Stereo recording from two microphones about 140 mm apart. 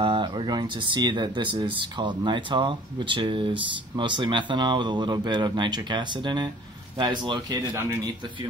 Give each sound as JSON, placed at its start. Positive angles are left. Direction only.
{"t": 0.0, "sound": "speech", "side_deg": -35}
{"t": 7.7, "sound": "speech", "side_deg": -20}